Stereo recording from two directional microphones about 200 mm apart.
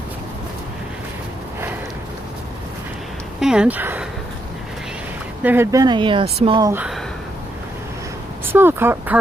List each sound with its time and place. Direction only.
3.4 s speech: 5° right (ahead or behind)
5.4 s speech: 10° right (ahead or behind); by 6.7 s 25° right (ahead or behind)
6.7 s speech: 5° right (ahead or behind)
8.5 s speech: 10° right (ahead or behind)